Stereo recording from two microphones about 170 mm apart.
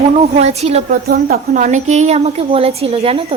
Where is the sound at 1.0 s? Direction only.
65° right (ahead or behind).